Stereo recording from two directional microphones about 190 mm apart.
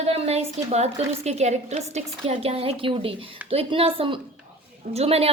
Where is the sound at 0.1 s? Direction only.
35° right (ahead or behind).